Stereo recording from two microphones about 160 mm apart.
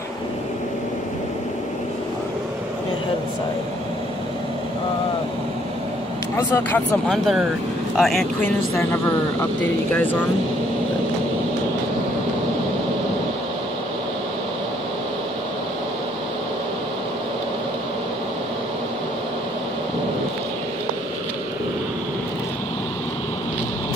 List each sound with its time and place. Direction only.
6.3 s speech: 15° left (ahead or behind)
7.1 s speech: centre (ahead or behind)